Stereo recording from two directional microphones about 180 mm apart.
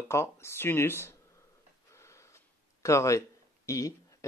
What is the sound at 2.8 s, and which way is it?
Speech, 15° left (ahead or behind).